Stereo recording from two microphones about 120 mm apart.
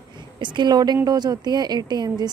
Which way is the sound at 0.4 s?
40° right (ahead or behind).